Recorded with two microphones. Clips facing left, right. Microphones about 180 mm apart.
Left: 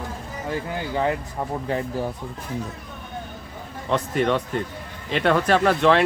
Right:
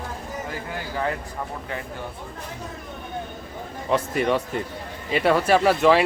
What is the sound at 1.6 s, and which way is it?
Speech, 35° left (ahead or behind).